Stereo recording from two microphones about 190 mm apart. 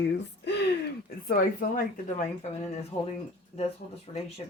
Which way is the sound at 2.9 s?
35° left (ahead or behind).